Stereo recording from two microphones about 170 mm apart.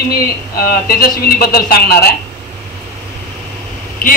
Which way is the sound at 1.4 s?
65° left (ahead or behind).